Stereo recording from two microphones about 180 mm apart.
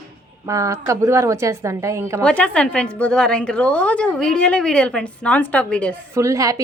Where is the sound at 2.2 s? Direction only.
5° left (ahead or behind).